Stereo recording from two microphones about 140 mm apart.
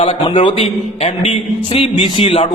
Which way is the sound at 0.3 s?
40° left (ahead or behind).